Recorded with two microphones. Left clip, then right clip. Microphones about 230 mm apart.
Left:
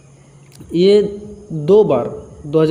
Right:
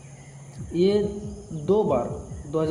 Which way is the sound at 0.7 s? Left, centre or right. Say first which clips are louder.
Left 10 dB; left.